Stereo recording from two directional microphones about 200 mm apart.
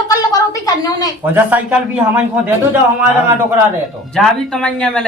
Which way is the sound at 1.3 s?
10° right (ahead or behind).